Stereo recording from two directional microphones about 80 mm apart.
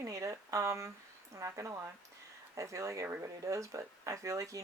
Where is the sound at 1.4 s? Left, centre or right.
Right.